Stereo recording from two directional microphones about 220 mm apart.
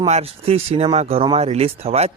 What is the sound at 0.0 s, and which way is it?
Speech, 30° right (ahead or behind).